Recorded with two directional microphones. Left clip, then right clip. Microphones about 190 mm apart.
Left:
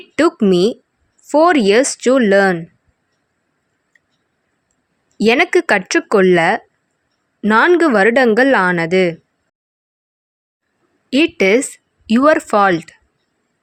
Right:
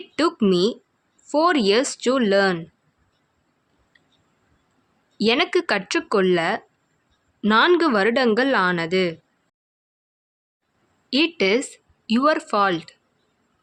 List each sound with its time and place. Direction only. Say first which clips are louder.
0.2 s speech: left 7 dB; 30° left (ahead or behind)
5.2 s speech: left 7 dB; 35° left (ahead or behind)
11.1 s speech: left 7 dB; 35° left (ahead or behind)